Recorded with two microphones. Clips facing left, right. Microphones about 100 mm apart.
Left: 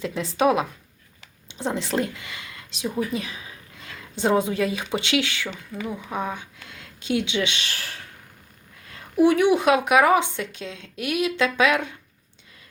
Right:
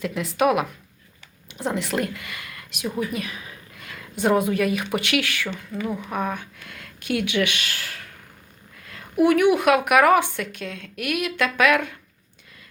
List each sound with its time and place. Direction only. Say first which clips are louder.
0.0 s a woman's voice: even; 30° left (ahead or behind)
7.7 s a sound: right 1 dB; 35° left (ahead or behind)
9.2 s speech: even; 25° left (ahead or behind)